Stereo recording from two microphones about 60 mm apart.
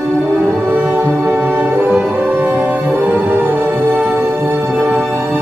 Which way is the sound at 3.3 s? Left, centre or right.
Right.